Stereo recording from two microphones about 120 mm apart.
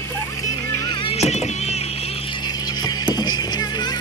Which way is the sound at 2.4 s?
35° left (ahead or behind).